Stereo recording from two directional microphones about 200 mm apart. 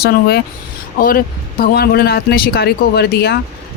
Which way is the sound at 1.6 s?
50° left (ahead or behind).